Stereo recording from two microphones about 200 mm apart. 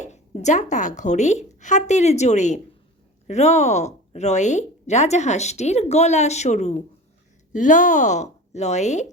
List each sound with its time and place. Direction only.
0.0 s a woman's voice: 35° left (ahead or behind)